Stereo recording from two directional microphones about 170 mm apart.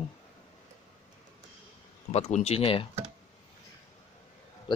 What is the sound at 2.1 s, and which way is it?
Speech, 40° left (ahead or behind).